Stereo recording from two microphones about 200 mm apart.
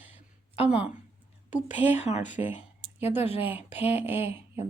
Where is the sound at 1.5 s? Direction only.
35° left (ahead or behind).